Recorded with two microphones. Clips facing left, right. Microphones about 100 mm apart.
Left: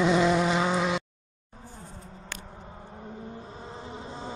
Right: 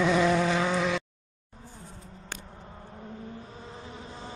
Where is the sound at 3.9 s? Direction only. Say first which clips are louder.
Left 4 dB; 25° left (ahead or behind).